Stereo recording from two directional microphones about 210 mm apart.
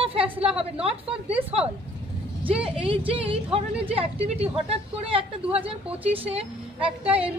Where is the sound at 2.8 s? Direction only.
25° right (ahead or behind).